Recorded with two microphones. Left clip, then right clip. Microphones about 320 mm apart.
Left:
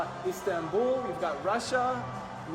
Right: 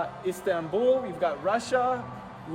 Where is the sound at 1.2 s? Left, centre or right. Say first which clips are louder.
Right 5 dB; right.